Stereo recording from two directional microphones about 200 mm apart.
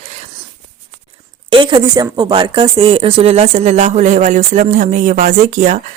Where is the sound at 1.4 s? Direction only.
25° right (ahead or behind).